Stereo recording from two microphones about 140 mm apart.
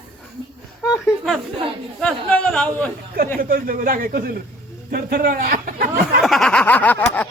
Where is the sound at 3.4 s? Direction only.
90° right.